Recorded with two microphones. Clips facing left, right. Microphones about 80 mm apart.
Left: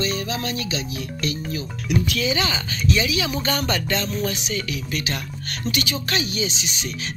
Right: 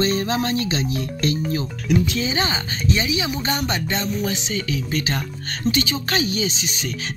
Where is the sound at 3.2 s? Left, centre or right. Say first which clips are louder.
Even; centre; by 6.9 s right.